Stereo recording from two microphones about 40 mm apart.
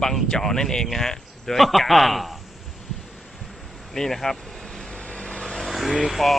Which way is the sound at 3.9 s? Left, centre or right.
Centre.